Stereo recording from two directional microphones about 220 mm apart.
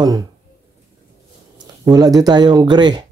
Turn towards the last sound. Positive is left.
turn(degrees=-20)  # may be behind; listen again after turning